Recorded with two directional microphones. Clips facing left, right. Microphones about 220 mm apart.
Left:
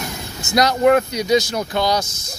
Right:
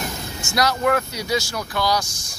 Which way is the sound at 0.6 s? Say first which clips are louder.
Left 6 dB; 20° left (ahead or behind).